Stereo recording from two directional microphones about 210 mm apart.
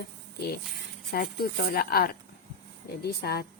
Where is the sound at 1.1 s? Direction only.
45° left (ahead or behind).